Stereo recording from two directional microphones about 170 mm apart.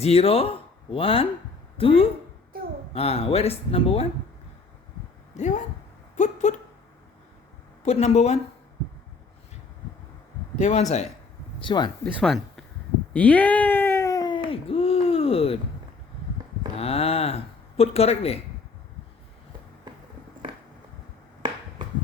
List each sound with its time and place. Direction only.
0.0 s speech: 35° left (ahead or behind)
5.4 s speech: 45° left (ahead or behind)
7.9 s speech: 40° left (ahead or behind)
10.6 s speech: 45° left (ahead or behind)
11.6 s speech: 25° left (ahead or behind)
13.1 s speech: 10° left (ahead or behind); by 15.5 s 35° left (ahead or behind)
16.7 s speech: 35° left (ahead or behind)